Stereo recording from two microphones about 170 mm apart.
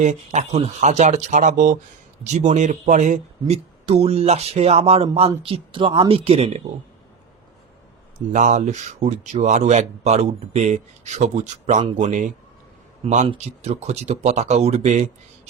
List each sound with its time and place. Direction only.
0.0 s speech: 45° right (ahead or behind)
8.3 s speech: 45° right (ahead or behind)